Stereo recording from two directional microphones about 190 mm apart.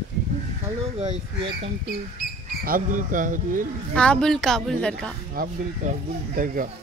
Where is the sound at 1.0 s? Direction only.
30° right (ahead or behind).